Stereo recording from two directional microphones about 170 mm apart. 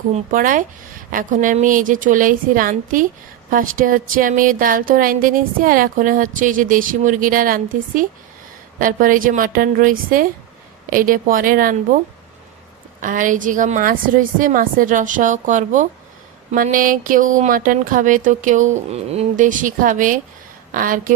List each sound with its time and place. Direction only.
0.1 s speech: 50° right (ahead or behind)
13.0 s speech: 50° right (ahead or behind)